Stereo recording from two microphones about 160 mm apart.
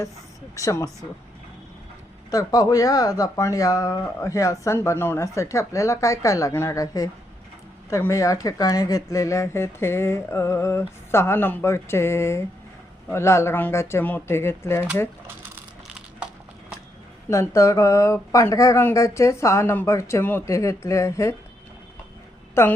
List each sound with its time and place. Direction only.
0.5 s speech: 20° left (ahead or behind)
2.3 s speech: 25° left (ahead or behind)
17.2 s speech: 15° left (ahead or behind)
22.6 s speech: 15° left (ahead or behind)